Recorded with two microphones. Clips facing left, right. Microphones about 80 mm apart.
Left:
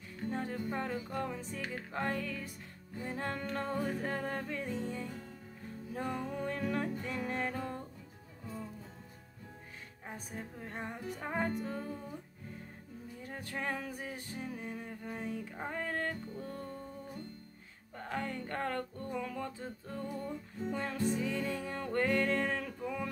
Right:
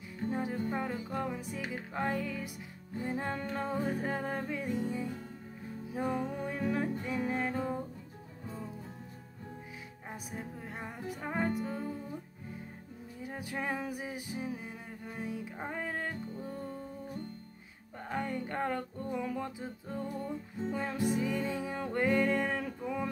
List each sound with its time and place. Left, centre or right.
0.3 s music: centre
10.0 s music: centre
13.2 s music: centre
17.9 s music: centre